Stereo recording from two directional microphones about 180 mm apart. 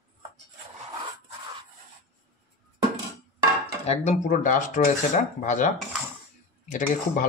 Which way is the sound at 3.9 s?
45° left (ahead or behind).